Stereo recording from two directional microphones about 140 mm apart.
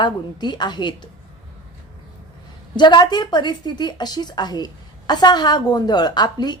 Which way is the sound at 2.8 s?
30° left (ahead or behind).